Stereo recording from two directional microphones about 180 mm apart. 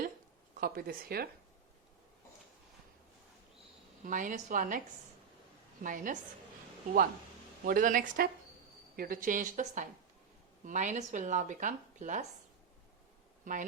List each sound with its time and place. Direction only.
0.6 s speech: 55° right (ahead or behind)
4.0 s speech: 45° right (ahead or behind)
5.8 s speech: 45° right (ahead or behind)
7.6 s speech: 50° right (ahead or behind)
13.4 s speech: 45° right (ahead or behind)